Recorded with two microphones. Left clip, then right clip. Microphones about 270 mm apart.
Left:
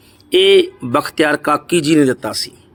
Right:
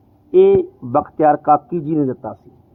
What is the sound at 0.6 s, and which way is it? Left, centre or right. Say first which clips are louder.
Speech: left 3 dB; left.